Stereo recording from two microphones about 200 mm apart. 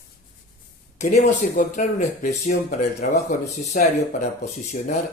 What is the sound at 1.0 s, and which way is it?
Speech, 35° left (ahead or behind).